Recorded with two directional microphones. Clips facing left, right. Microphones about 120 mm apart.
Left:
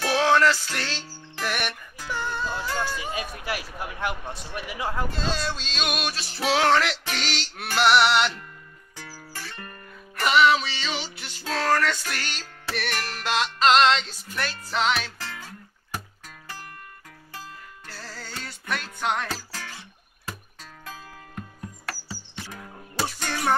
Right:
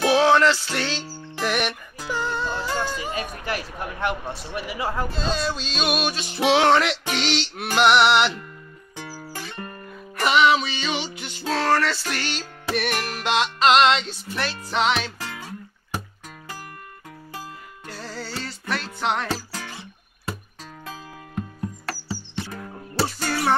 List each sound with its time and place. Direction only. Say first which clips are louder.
0.0 s music: right 3 dB; 10° right (ahead or behind)
3.1 s speech: right 2 dB; 10° left (ahead or behind)
4.3 s music: right 4 dB; centre (ahead or behind)
5.5 s music: right 5 dB; 10° right (ahead or behind)
6.5 s music: right 3 dB; 10° right (ahead or behind)
10.1 s music: right 1 dB; 5° right (ahead or behind)
12.9 s music: right 4 dB; 15° right (ahead or behind)
13.4 s music: right 2 dB; 5° right (ahead or behind)
17.3 s music: right 3 dB; 15° right (ahead or behind)
18.4 s music: right 1 dB; centre (ahead or behind)
19.5 s music: right 4 dB; 15° right (ahead or behind)
20.8 s music: right 2 dB; centre (ahead or behind)